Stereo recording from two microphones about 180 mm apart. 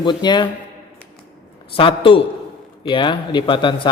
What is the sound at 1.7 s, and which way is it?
Speech, 30° left (ahead or behind).